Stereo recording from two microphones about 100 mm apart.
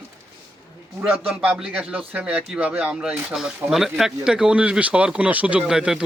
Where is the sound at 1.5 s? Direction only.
5° right (ahead or behind).